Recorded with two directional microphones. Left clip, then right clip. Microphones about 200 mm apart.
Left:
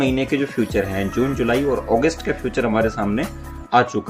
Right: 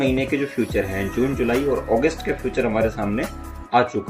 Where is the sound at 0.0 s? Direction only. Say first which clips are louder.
Left 1 dB; 55° left (ahead or behind).